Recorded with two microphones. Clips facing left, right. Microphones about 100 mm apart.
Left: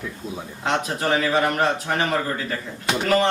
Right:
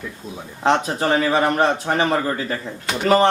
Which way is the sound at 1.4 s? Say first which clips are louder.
Right 3 dB; 30° right (ahead or behind).